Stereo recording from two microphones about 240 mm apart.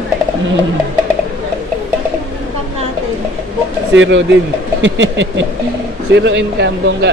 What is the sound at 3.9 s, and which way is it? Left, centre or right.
Speech, right.